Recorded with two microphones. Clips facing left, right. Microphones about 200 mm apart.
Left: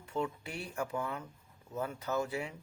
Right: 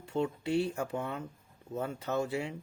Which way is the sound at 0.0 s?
30° right (ahead or behind).